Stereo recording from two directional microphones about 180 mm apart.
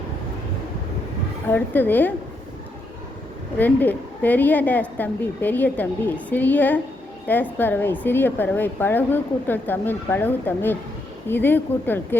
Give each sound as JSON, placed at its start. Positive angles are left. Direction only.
{"t": 1.5, "sound": "a woman's voice", "side_deg": 10}
{"t": 3.6, "sound": "a woman's voice", "side_deg": 10}